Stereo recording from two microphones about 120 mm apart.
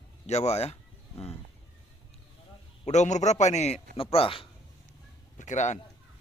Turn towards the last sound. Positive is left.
turn(degrees=85)